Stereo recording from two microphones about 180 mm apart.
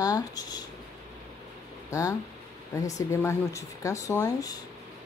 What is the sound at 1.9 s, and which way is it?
Speech, 20° left (ahead or behind).